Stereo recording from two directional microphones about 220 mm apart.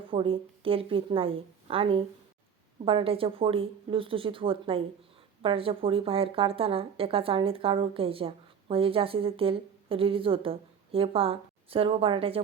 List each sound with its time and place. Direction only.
0.1 s a woman's voice: 25° right (ahead or behind)